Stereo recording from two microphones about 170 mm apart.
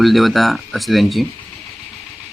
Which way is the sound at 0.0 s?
Centre (ahead or behind).